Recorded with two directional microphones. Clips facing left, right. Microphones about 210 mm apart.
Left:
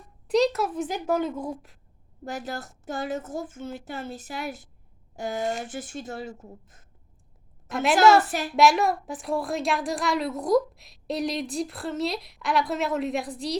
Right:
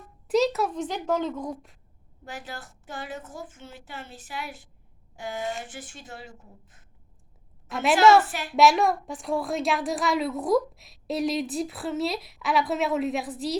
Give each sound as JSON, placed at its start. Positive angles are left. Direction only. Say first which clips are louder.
{"t": 0.3, "sound": "speech", "louder": "left 1 dB", "side_deg": -5}
{"t": 2.2, "sound": "a woman's voice", "louder": "left 6 dB", "side_deg": 40}
{"t": 7.7, "sound": "a woman's voice", "louder": "even", "side_deg": 0}
{"t": 8.3, "sound": "a woman's voice", "louder": "left 5 dB", "side_deg": 40}
{"t": 8.5, "sound": "a woman's voice", "louder": "right 1 dB", "side_deg": 0}